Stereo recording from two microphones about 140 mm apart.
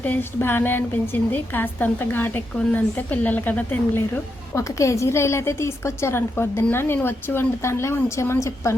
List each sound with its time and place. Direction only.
0.0 s a woman's voice: 15° left (ahead or behind)